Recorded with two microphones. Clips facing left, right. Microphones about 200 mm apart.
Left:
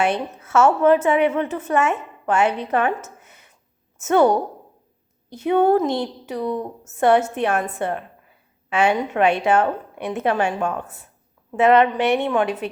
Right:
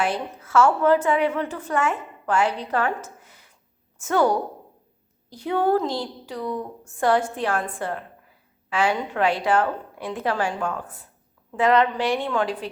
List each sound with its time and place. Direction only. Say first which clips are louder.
0.0 s a woman's voice: left 4 dB; 25° left (ahead or behind)